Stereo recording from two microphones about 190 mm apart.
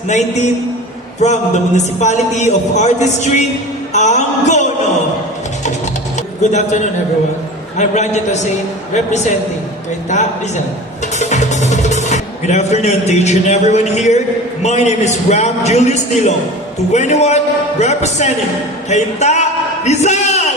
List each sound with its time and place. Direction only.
1.2 s a man's voice: 40° left (ahead or behind)
5.6 s a sound: 40° left (ahead or behind)
7.8 s a man's voice: 40° left (ahead or behind)